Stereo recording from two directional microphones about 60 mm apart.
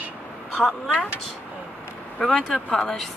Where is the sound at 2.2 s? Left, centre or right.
Centre.